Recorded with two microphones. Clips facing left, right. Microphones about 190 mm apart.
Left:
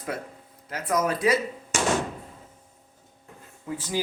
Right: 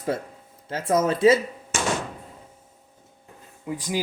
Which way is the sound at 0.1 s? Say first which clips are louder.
Right 4 dB; 25° right (ahead or behind).